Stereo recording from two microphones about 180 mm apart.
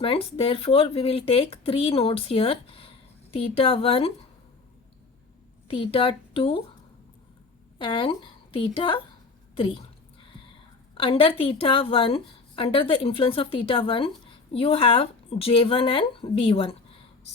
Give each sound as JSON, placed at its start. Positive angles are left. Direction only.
{"t": 0.0, "sound": "speech", "side_deg": 30}
{"t": 5.6, "sound": "speech", "side_deg": 30}
{"t": 7.8, "sound": "a woman's voice", "side_deg": 30}
{"t": 10.9, "sound": "a woman's voice", "side_deg": 30}